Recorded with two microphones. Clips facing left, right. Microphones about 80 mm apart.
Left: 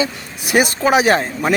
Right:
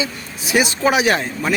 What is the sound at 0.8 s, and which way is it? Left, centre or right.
Speech, left.